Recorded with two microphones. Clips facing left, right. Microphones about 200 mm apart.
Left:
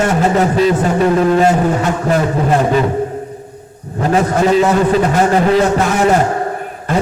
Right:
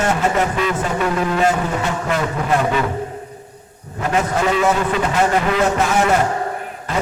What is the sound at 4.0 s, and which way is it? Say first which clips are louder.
A man's voice: left 6 dB; 35° left (ahead or behind).